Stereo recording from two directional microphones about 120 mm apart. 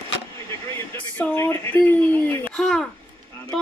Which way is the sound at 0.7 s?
15° left (ahead or behind).